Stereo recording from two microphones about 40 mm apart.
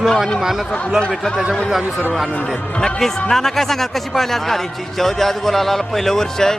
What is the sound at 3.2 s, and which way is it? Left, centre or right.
A man's voice, centre.